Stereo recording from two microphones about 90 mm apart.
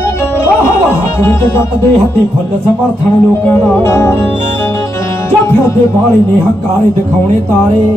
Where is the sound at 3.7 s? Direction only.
30° left (ahead or behind).